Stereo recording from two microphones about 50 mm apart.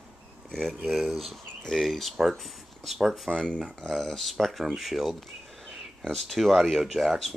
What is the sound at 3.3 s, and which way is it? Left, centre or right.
Speech, centre.